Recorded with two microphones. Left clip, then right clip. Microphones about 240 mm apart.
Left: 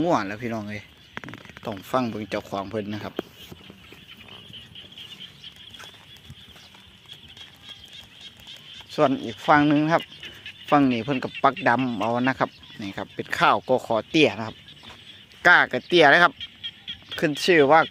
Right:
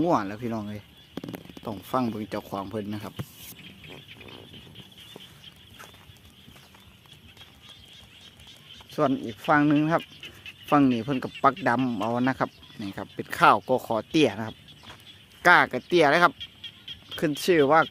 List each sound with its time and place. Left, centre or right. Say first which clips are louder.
0.1 s speech: left 2 dB; centre
1.6 s speech: left 3 dB; centre
8.2 s a sound: left 6 dB; centre
11.6 s speech: left 3 dB; centre
16.4 s fowl: left 5 dB; centre
17.4 s speech: left 3 dB; centre